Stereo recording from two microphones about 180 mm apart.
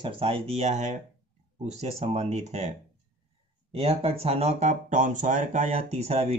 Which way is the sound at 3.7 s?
35° right (ahead or behind).